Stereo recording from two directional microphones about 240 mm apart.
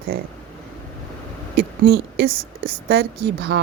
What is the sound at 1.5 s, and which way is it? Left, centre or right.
A woman's voice, right.